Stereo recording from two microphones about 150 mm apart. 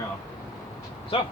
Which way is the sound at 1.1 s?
35° left (ahead or behind).